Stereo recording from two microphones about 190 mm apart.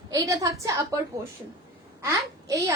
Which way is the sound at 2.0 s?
15° right (ahead or behind).